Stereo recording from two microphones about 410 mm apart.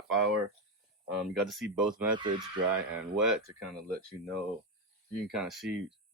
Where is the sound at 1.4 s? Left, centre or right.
Centre.